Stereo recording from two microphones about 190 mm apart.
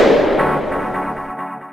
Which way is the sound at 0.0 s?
Centre (ahead or behind).